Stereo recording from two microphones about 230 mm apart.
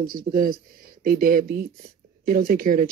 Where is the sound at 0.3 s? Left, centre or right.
Right.